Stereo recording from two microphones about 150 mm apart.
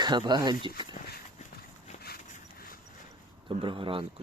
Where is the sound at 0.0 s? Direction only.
30° right (ahead or behind).